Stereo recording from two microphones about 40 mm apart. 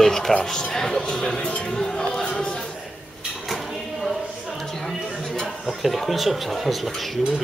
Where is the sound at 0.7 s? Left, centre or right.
Centre.